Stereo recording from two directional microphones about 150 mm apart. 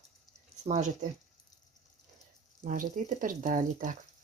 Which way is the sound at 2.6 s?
55° right (ahead or behind).